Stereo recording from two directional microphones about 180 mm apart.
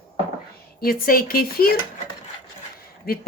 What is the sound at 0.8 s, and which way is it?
Speech, 55° left (ahead or behind).